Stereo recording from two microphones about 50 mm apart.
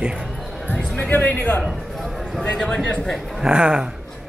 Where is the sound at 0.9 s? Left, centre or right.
Left.